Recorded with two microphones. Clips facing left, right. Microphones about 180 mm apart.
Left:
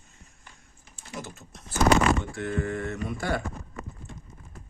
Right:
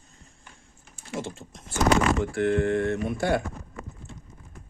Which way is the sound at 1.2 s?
25° right (ahead or behind).